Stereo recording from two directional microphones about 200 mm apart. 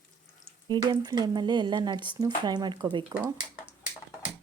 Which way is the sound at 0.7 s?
20° right (ahead or behind).